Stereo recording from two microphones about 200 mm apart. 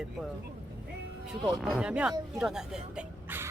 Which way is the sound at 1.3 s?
Centre (ahead or behind).